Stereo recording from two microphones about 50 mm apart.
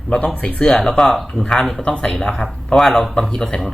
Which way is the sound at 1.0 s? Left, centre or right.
Centre.